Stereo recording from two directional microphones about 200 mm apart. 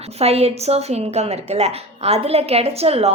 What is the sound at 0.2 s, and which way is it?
A woman's voice, 30° right (ahead or behind).